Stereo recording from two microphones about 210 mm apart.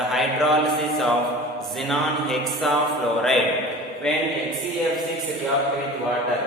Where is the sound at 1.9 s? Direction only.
Centre (ahead or behind).